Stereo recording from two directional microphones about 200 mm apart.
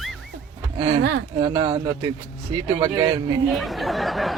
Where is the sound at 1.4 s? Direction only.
25° right (ahead or behind).